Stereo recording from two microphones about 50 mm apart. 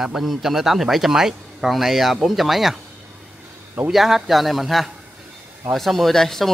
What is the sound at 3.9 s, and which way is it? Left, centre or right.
Speech, centre.